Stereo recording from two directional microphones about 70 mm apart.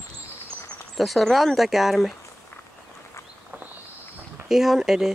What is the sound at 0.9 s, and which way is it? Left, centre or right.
Speech, centre.